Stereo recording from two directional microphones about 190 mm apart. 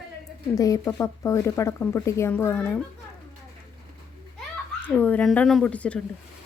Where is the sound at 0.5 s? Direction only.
20° left (ahead or behind).